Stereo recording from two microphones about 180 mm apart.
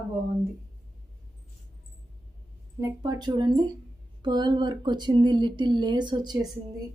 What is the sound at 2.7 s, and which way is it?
Speech, 20° right (ahead or behind).